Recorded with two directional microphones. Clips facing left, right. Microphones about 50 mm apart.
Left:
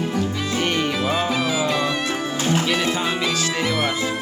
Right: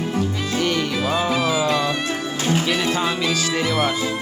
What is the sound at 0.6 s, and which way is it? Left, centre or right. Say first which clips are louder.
Music: even; left.